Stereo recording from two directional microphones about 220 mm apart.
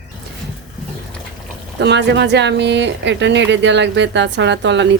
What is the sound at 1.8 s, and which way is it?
Speech, 55° right (ahead or behind).